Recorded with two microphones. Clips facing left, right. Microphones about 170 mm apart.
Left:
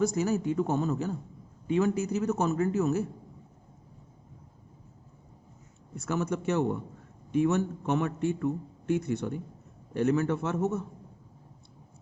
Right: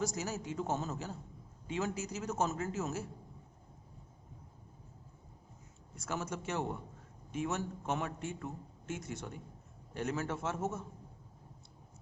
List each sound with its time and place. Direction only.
0.0 s a man's voice: 60° left (ahead or behind)
6.1 s a man's voice: 60° left (ahead or behind)